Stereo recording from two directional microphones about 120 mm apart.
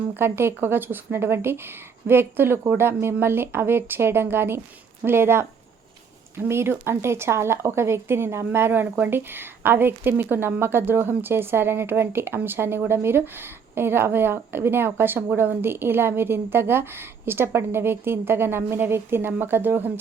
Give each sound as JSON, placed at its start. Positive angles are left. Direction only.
{"t": 0.2, "sound": "speech", "side_deg": -20}